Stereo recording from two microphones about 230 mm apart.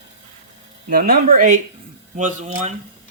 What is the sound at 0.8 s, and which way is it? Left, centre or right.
Speech, right.